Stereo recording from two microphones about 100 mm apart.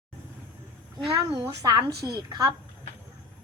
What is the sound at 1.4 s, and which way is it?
A woman's voice, 40° right (ahead or behind).